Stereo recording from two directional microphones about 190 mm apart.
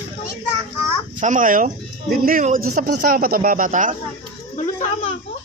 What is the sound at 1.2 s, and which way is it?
A man's voice, 40° right (ahead or behind).